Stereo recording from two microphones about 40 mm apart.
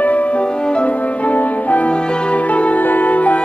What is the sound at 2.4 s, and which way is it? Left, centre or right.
Music, left.